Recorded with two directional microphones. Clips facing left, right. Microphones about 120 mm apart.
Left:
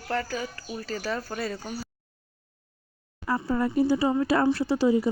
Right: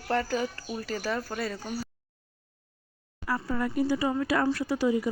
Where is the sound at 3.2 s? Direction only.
25° left (ahead or behind).